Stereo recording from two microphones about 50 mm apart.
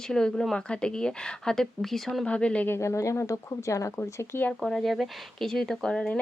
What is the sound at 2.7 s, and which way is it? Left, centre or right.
Speech, left.